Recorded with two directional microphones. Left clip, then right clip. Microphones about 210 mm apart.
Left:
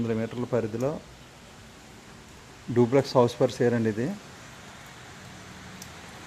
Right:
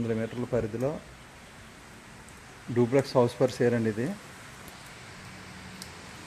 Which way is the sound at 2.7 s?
5° left (ahead or behind).